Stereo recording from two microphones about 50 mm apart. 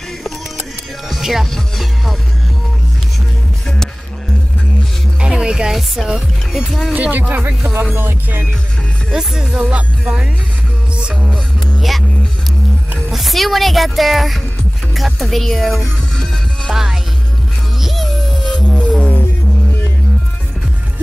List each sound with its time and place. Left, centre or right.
1.0 s music: centre
5.2 s music: centre
5.8 s speech: centre
6.9 s speech: right
7.9 s music: right
9.1 s speech: centre
9.8 s music: centre
11.6 s music: centre
13.1 s speech: centre
16.7 s speech: centre
17.7 s music: centre